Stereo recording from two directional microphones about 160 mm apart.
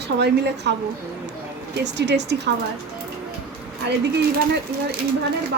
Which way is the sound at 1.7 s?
90° right.